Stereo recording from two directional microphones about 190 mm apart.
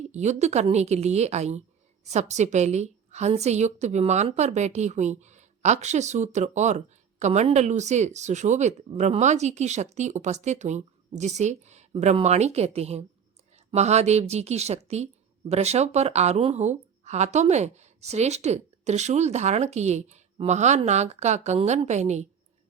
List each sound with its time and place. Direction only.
0.1 s a woman's voice: 35° right (ahead or behind)